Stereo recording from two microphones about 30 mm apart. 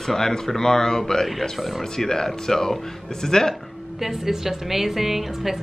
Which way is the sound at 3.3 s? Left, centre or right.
Left.